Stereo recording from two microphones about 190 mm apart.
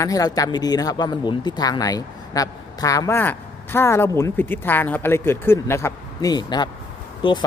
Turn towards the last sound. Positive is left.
turn(degrees=25)  # may be behind; listen again after turning